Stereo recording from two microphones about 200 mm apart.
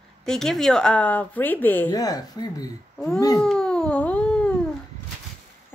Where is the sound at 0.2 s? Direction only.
Centre (ahead or behind); by 2.7 s 20° left (ahead or behind).